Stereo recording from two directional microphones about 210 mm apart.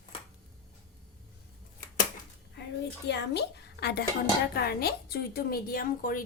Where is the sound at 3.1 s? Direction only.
55° left (ahead or behind).